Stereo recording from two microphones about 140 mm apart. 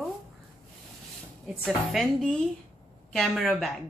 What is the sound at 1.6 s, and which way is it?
Speech, centre (ahead or behind).